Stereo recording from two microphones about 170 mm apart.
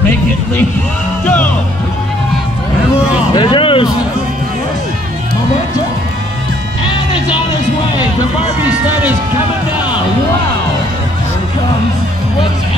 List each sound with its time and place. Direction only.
1.2 s music: 10° left (ahead or behind)
3.3 s vehicle: 30° left (ahead or behind)
8.6 s a sound: 10° right (ahead or behind)